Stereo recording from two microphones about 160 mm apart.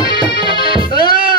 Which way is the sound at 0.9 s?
65° left (ahead or behind).